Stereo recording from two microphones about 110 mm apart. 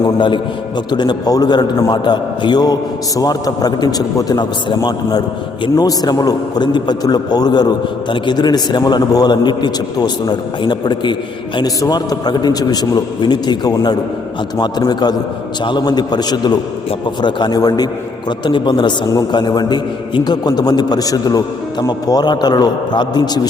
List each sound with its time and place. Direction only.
0.0 s a man's voice: 45° left (ahead or behind)